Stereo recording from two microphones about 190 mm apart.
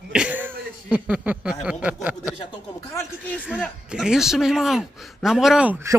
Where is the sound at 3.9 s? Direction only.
5° right (ahead or behind).